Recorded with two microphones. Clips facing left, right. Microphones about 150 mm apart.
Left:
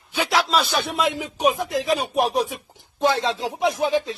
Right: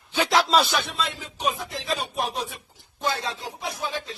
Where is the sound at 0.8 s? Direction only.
65° left (ahead or behind).